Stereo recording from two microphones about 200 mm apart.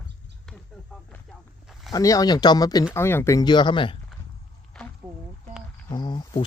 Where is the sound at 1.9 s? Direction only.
15° left (ahead or behind).